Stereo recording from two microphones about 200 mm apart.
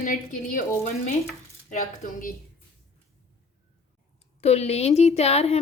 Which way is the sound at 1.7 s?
40° left (ahead or behind).